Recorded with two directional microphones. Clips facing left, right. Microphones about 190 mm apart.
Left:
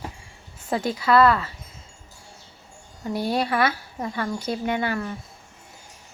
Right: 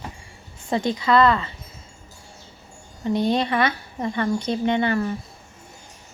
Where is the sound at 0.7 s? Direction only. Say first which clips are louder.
Right 1 dB; 5° left (ahead or behind).